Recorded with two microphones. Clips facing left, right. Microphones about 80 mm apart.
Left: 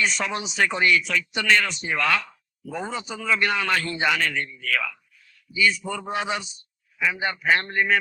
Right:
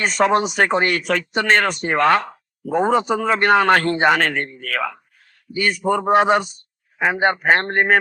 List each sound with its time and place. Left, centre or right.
0.0 s speech: right